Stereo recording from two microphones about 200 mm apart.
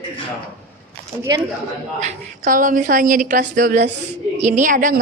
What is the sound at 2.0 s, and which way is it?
A woman's voice, 40° right (ahead or behind).